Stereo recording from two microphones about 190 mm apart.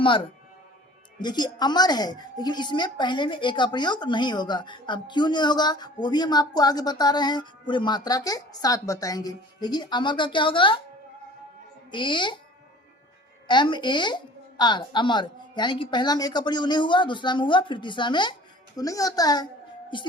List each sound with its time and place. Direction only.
1.2 s a woman's voice: 20° left (ahead or behind)
11.9 s a woman's voice: 25° left (ahead or behind)
13.5 s a woman's voice: 25° left (ahead or behind)